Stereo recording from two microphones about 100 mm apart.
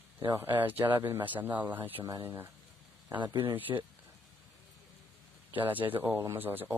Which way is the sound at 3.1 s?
50° right (ahead or behind).